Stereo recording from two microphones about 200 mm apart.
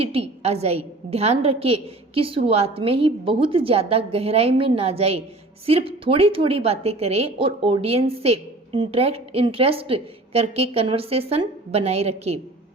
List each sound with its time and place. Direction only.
0.0 s a woman's voice: 30° right (ahead or behind)